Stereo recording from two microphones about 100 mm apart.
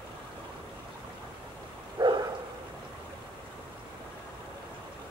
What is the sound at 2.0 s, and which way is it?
Dog, 50° right (ahead or behind).